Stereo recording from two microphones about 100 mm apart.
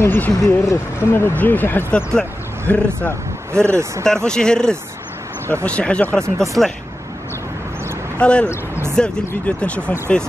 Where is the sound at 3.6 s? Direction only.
30° right (ahead or behind).